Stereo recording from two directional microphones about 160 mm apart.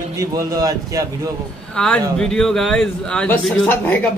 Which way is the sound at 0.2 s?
20° right (ahead or behind).